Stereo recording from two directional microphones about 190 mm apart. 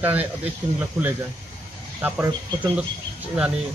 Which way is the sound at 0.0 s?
10° right (ahead or behind).